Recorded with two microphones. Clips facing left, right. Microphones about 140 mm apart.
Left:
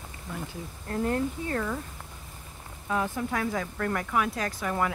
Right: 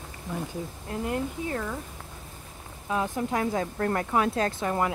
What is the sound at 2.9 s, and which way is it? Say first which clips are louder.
Speech: right 1 dB; 20° right (ahead or behind).